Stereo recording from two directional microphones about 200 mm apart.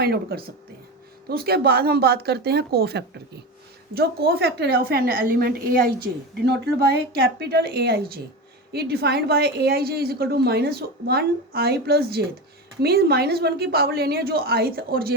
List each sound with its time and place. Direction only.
0.0 s a woman's voice: 50° right (ahead or behind)